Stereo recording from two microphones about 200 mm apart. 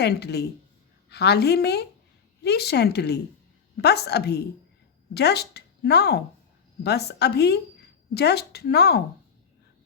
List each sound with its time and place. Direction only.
0.0 s speech: 55° left (ahead or behind)